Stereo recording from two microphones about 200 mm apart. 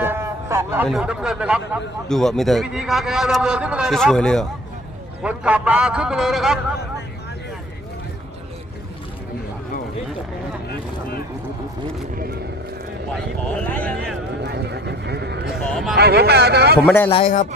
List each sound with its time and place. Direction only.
0.0 s a sound: 10° right (ahead or behind)
0.9 s a man's voice: centre (ahead or behind)
12.1 s vehicle: 50° right (ahead or behind)
14.4 s horse: 55° right (ahead or behind)
15.6 s a man's voice: centre (ahead or behind)
16.0 s speech: 55° right (ahead or behind)
16.8 s a man's voice: 10° left (ahead or behind)
17.1 s a man's voice: 30° left (ahead or behind)